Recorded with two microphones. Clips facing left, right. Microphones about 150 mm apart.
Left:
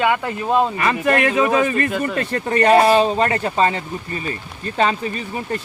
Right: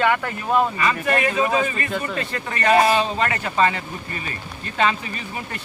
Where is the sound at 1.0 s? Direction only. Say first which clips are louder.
Left 6 dB; 60° left (ahead or behind).